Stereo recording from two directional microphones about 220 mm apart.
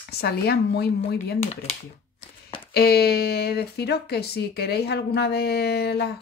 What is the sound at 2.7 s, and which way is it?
Speech, 45° left (ahead or behind).